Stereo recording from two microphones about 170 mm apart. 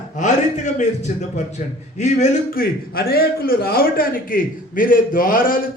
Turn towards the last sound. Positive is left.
turn(degrees=55)  # may be behind; listen again after turning